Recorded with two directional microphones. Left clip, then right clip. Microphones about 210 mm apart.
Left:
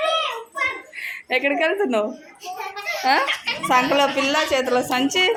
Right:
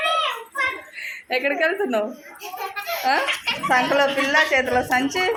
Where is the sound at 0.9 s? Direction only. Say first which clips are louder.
Left 2 dB; 15° left (ahead or behind).